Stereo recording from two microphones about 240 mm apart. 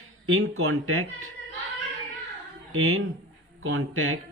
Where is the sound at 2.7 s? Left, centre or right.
Right.